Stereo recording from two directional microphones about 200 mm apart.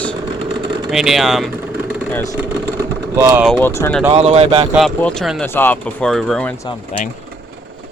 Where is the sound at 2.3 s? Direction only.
15° right (ahead or behind).